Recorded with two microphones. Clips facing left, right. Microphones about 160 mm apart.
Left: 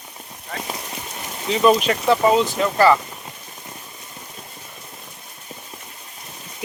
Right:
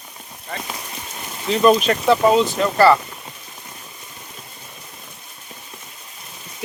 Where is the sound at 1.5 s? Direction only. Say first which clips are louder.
Right 1 dB; 10° left (ahead or behind).